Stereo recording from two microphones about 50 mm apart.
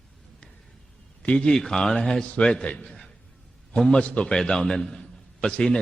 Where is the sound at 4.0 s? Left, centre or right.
Left.